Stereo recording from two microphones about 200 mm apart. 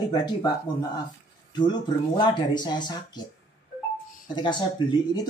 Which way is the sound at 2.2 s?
20° left (ahead or behind).